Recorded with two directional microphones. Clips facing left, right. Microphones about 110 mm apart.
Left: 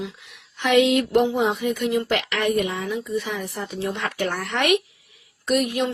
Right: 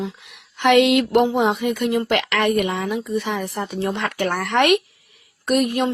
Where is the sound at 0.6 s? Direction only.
65° right (ahead or behind).